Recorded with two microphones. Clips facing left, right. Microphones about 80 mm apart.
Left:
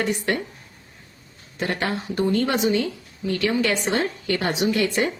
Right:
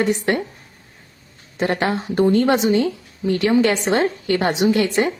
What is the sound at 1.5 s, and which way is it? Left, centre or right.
A woman's voice, right.